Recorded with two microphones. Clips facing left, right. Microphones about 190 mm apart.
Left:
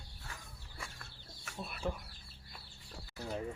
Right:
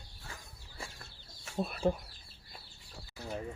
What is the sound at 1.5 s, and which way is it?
Speech, 35° right (ahead or behind).